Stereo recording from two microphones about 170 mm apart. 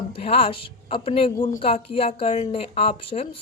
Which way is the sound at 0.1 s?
35° left (ahead or behind).